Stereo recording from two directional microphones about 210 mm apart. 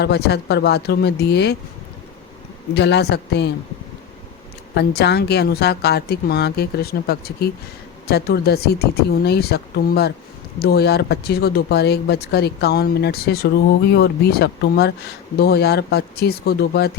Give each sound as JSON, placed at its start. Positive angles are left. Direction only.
{"t": 0.0, "sound": "speech", "side_deg": 50}
{"t": 2.7, "sound": "speech", "side_deg": 55}
{"t": 4.7, "sound": "speech", "side_deg": 50}